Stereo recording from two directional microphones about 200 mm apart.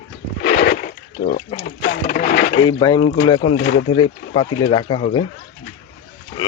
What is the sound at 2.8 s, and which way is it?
Speech, 25° left (ahead or behind).